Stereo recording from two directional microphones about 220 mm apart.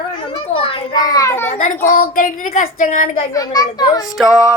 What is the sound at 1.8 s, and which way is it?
Speech, 40° left (ahead or behind).